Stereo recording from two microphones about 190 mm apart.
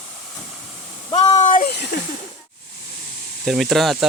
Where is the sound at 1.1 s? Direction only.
30° left (ahead or behind); by 1.8 s 45° left (ahead or behind).